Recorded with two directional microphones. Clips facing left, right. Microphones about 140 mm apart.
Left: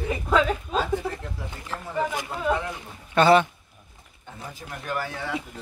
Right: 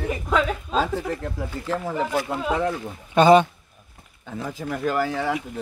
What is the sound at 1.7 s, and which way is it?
Speech, 90° right.